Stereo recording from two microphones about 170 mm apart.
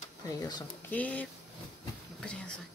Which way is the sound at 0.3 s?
25° left (ahead or behind).